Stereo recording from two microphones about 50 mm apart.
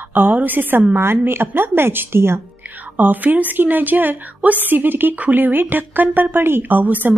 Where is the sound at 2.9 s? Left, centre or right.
Right.